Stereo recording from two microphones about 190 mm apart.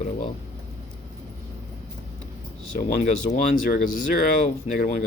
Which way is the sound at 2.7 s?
40° left (ahead or behind).